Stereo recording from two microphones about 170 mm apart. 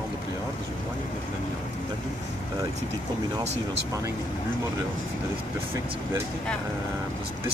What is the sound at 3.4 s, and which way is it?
Speech, 40° right (ahead or behind).